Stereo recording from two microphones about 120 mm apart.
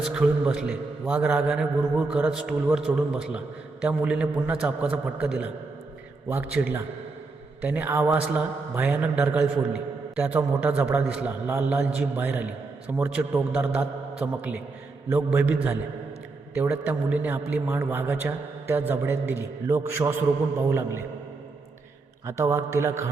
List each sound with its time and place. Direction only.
0.0 s a man's voice: 5° right (ahead or behind)
22.3 s a man's voice: 20° right (ahead or behind)